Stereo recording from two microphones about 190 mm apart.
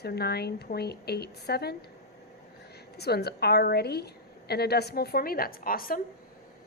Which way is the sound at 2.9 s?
60° left (ahead or behind).